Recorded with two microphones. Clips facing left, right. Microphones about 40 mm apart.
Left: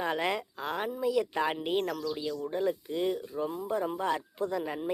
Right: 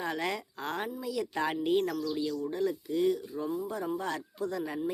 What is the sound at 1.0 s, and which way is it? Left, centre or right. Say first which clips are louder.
Speech: left 5 dB; centre.